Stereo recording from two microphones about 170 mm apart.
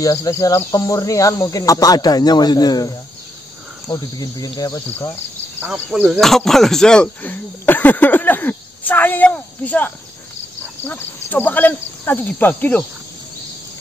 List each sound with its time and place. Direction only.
0.0 s speech: 20° left (ahead or behind)
5.6 s speech: 5° right (ahead or behind); by 12.8 s 10° left (ahead or behind)